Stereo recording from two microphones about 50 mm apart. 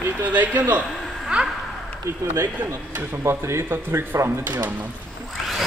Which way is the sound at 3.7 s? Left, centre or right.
Right.